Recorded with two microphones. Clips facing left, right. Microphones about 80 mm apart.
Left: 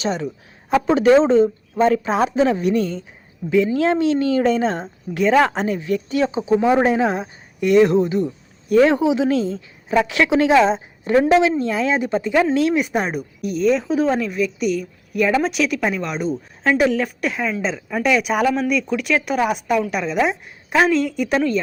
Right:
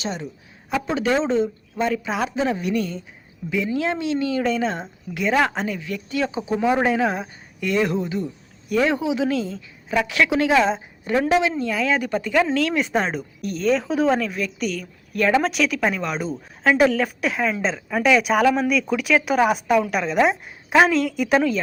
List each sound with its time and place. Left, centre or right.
0.7 s a woman's voice: left; by 21.6 s centre